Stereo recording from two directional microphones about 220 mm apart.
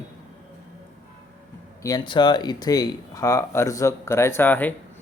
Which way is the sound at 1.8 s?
20° left (ahead or behind).